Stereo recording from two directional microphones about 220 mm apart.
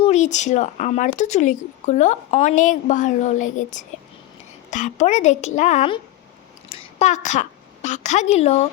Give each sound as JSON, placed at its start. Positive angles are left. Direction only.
{"t": 0.0, "sound": "a woman's voice", "side_deg": 30}